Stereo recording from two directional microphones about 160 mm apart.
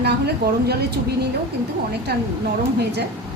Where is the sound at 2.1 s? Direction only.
90° right.